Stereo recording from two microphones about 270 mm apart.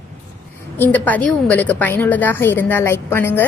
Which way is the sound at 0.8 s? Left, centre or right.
Centre.